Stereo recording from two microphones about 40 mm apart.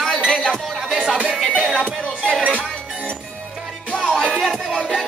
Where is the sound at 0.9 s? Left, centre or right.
Centre.